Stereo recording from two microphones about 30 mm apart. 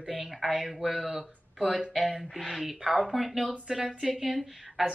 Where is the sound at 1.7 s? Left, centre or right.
Right.